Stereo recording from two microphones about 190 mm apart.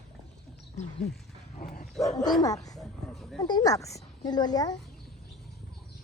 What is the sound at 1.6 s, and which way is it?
Dog, 50° left (ahead or behind).